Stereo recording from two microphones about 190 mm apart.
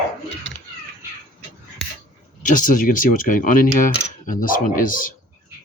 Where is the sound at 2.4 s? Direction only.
45° left (ahead or behind).